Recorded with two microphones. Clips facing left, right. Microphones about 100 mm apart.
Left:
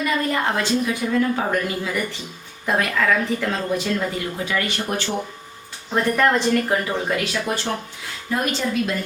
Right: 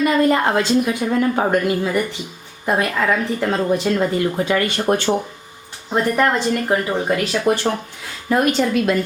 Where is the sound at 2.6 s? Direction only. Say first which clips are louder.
Right 2 dB; 20° right (ahead or behind).